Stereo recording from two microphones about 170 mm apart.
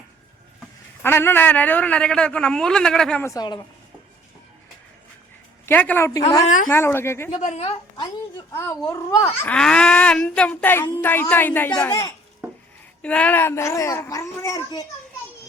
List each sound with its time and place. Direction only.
1.0 s a man's voice: 15° left (ahead or behind)
3.2 s a woman's voice: 25° left (ahead or behind)
5.6 s speech: 10° left (ahead or behind)
7.3 s a woman's voice: 40° left (ahead or behind)
8.8 s speech: 20° left (ahead or behind)
9.5 s speech: 5° left (ahead or behind)
11.9 s a woman's voice: 20° left (ahead or behind)
13.0 s speech: 5° left (ahead or behind)